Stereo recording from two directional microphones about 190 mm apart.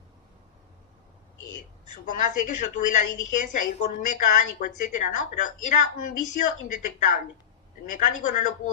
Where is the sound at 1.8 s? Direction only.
40° left (ahead or behind).